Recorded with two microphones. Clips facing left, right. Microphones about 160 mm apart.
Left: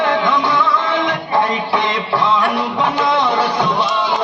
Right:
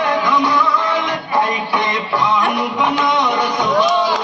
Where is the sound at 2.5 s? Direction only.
30° left (ahead or behind).